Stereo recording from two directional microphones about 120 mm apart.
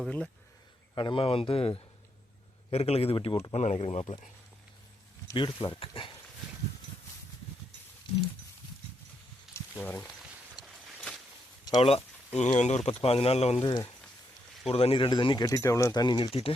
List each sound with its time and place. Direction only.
0.9 s speech: 45° left (ahead or behind)
3.5 s speech: 70° left (ahead or behind); by 4.2 s 50° left (ahead or behind)
5.3 s speech: 40° left (ahead or behind)
9.5 s a sound: 15° left (ahead or behind)
10.6 s a sound: centre (ahead or behind)
11.6 s a sound: 30° left (ahead or behind)
11.9 s speech: 55° left (ahead or behind)
12.9 s speech: 55° left (ahead or behind)
14.7 s speech: 55° left (ahead or behind)
15.4 s speech: 25° left (ahead or behind); by 16.6 s 50° left (ahead or behind)